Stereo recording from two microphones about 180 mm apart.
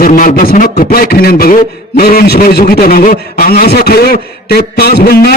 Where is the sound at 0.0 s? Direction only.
50° left (ahead or behind).